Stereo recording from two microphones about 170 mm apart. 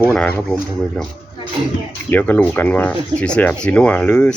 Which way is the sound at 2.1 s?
10° left (ahead or behind).